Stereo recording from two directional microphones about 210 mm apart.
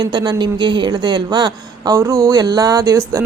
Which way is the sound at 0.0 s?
20° right (ahead or behind).